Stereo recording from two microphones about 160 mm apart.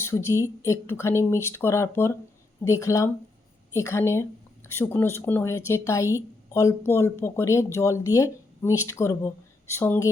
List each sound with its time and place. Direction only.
0.0 s a woman's voice: 15° left (ahead or behind)